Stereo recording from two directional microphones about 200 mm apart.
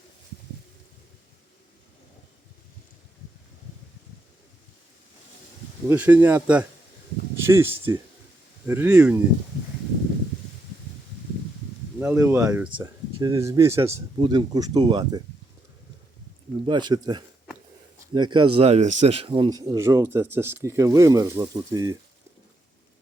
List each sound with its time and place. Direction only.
5.9 s speech: 10° right (ahead or behind)
11.9 s speech: 10° right (ahead or behind)
16.6 s speech: 20° right (ahead or behind)